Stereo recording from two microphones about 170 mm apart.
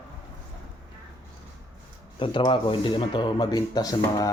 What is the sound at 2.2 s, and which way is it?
Speech, 30° left (ahead or behind).